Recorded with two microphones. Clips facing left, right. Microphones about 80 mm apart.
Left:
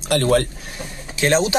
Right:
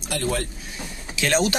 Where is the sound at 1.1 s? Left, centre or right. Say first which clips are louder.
Left 5 dB; left.